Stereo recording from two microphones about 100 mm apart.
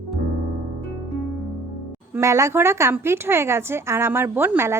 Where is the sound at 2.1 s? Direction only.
30° right (ahead or behind).